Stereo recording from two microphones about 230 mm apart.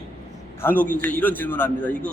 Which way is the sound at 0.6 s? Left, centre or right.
Centre.